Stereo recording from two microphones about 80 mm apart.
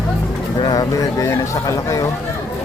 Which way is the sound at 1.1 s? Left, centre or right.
Left.